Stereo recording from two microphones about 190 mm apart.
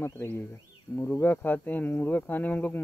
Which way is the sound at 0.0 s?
15° left (ahead or behind).